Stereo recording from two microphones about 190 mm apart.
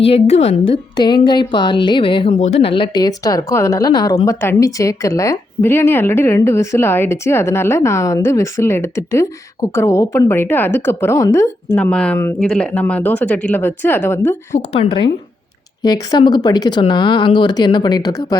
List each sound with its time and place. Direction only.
0.0 s a woman's voice: 30° left (ahead or behind); by 14.2 s 10° left (ahead or behind)
14.7 s speech: 30° left (ahead or behind)